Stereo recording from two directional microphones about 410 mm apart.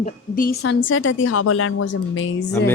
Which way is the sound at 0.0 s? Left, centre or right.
Left.